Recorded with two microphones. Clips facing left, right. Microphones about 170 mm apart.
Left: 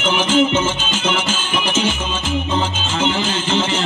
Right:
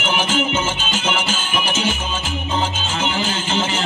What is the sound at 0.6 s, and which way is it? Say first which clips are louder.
Music: left 2 dB; 40° right (ahead or behind).